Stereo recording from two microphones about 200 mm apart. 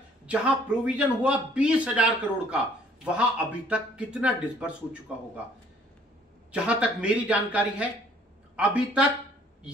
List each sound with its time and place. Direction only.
0.3 s a man's voice: 5° right (ahead or behind)
6.5 s a man's voice: 5° right (ahead or behind)